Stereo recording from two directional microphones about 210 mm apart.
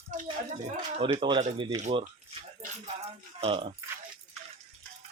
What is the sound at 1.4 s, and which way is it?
Speech, 25° right (ahead or behind).